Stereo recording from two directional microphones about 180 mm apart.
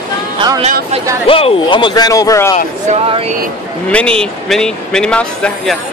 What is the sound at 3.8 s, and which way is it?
Speech, 5° left (ahead or behind).